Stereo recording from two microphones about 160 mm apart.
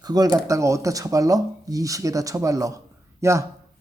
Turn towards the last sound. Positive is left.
turn(degrees=-20)  # may be behind; listen again after turning